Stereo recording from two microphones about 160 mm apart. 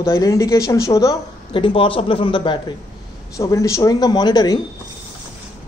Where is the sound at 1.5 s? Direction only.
35° left (ahead or behind).